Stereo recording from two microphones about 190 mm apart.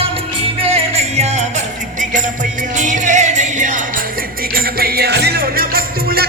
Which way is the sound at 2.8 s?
40° right (ahead or behind).